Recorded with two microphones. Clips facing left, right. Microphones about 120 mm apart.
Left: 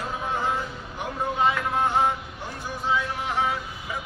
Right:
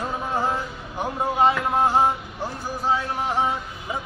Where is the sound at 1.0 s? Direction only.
35° right (ahead or behind).